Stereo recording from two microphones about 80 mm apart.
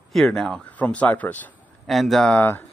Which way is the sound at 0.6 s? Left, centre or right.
Centre.